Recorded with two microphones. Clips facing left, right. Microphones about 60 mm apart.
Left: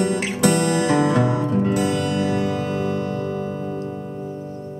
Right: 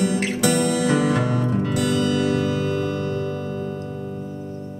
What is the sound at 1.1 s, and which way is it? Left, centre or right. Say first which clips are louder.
Music: left 2 dB; centre.